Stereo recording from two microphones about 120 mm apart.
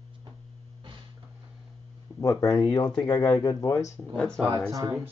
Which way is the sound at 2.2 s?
30° left (ahead or behind).